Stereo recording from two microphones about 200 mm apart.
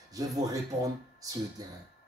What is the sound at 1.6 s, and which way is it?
Speech, 20° right (ahead or behind).